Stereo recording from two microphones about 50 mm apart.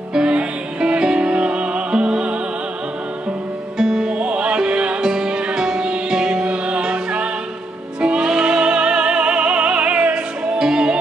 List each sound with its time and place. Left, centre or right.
0.1 s music: centre
3.7 s music: centre